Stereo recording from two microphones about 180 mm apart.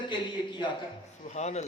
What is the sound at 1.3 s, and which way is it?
Speech, 40° left (ahead or behind).